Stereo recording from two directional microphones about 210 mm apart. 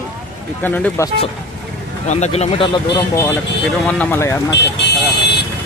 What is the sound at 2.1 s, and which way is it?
Speech, 30° left (ahead or behind).